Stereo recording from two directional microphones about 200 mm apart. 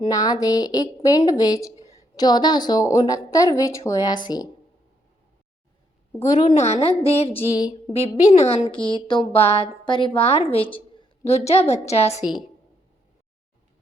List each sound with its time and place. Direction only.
0.0 s a woman's voice: 20° left (ahead or behind)
6.5 s a woman's voice: 35° left (ahead or behind)